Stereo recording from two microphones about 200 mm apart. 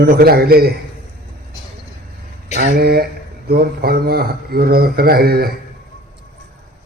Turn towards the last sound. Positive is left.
turn(degrees=-50)  # may be behind; listen again after turning